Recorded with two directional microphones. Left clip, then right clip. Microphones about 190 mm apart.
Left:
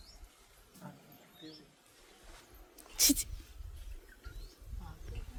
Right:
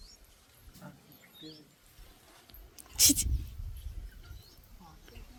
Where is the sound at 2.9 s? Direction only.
5° left (ahead or behind).